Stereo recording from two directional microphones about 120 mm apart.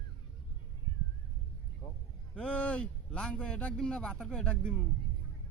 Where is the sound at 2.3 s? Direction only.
10° left (ahead or behind).